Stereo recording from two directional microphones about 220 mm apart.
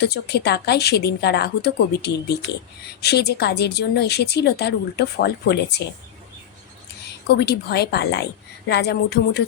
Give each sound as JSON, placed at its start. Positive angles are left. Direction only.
{"t": 0.0, "sound": "a woman's voice", "side_deg": 50}
{"t": 7.3, "sound": "a woman's voice", "side_deg": 50}